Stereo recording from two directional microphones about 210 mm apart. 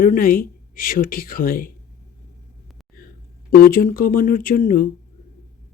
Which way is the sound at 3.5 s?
45° left (ahead or behind).